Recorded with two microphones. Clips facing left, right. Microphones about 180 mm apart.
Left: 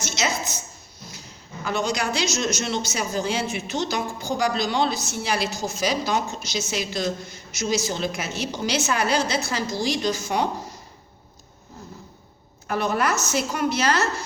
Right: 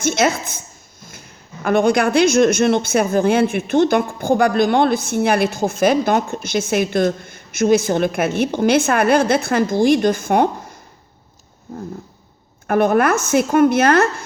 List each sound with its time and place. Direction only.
0.0 s a woman's voice: 55° right (ahead or behind)
12.6 s speech: 55° right (ahead or behind)